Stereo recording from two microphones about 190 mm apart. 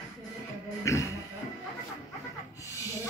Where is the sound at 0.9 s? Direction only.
15° left (ahead or behind).